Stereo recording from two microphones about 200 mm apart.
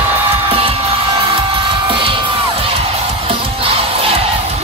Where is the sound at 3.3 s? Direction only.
30° right (ahead or behind).